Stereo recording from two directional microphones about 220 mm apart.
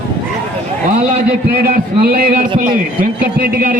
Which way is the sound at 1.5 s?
40° right (ahead or behind).